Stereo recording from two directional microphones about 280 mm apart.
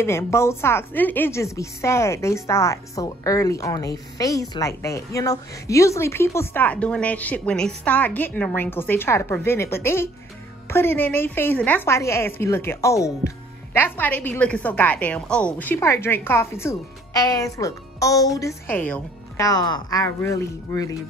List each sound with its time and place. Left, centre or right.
0.0 s a woman's voice: centre